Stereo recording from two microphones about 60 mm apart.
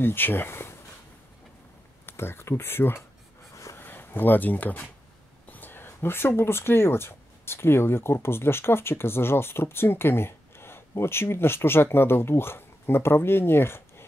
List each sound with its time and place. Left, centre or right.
0.0 s speech: left
2.0 s speech: left
3.7 s a sound: left
5.5 s speech: left